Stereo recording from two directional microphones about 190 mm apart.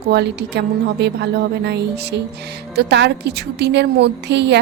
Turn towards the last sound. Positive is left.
turn(degrees=-65)  # may be behind; listen again after turning